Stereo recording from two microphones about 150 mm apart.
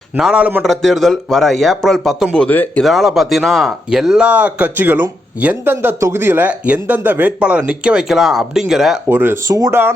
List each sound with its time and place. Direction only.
0.2 s speech: 5° right (ahead or behind)
2.8 s speech: centre (ahead or behind)
9.0 s speech: 15° right (ahead or behind)